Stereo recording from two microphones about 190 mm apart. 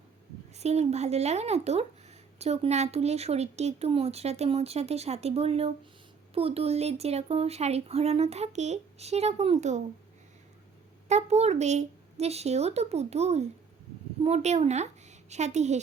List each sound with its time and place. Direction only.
0.5 s speech: 35° right (ahead or behind)
11.1 s a woman's voice: 35° right (ahead or behind)